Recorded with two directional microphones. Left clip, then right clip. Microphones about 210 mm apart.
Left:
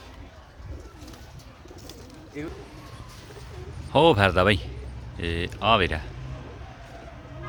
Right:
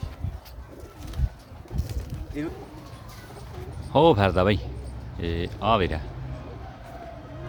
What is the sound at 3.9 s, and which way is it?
Speech, 5° right (ahead or behind).